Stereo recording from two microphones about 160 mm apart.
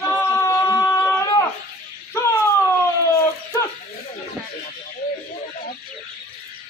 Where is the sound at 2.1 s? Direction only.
15° left (ahead or behind).